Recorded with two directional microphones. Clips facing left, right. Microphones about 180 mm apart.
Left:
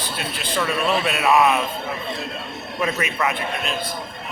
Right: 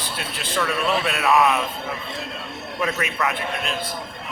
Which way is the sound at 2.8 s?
5° left (ahead or behind).